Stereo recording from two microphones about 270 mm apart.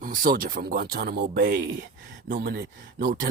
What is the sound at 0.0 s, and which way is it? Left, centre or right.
Speech, right.